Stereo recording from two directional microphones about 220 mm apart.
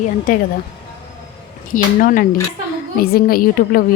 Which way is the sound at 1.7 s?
40° left (ahead or behind).